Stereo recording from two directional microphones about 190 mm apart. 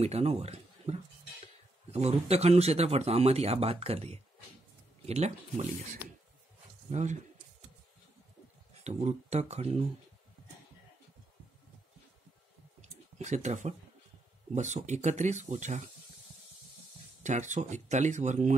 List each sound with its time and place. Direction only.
0.0 s speech: 35° right (ahead or behind)
6.9 s speech: 40° right (ahead or behind)
8.8 s speech: 35° right (ahead or behind)
12.8 s a sound: 35° right (ahead or behind)
14.5 s speech: 40° right (ahead or behind)
17.2 s speech: 40° right (ahead or behind)